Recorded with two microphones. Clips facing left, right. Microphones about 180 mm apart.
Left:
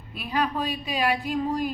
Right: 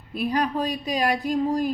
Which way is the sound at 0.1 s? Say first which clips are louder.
Right 3 dB; 40° right (ahead or behind).